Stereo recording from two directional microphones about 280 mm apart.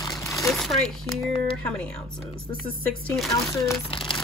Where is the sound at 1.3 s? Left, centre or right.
Centre.